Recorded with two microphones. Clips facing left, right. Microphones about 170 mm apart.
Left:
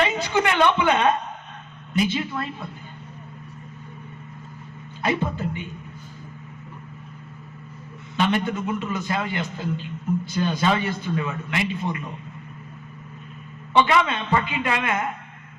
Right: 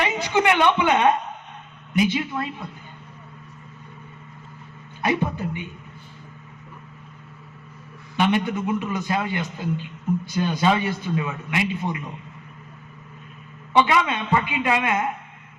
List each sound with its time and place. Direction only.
0.0 s a sound: 15° right (ahead or behind)
1.9 s a man's voice: 15° right (ahead or behind)
5.0 s a man's voice: 15° right (ahead or behind)
8.1 s a man's voice: 15° right (ahead or behind)
13.7 s a man's voice: 15° right (ahead or behind)